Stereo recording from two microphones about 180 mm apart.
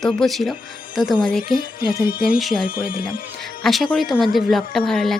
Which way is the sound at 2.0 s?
55° left (ahead or behind).